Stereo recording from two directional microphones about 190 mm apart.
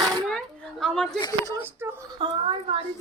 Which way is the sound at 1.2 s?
20° left (ahead or behind).